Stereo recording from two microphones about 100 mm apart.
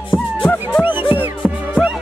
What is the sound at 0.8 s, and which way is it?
Music, 20° right (ahead or behind).